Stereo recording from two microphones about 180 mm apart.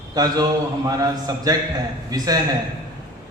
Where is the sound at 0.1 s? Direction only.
20° right (ahead or behind).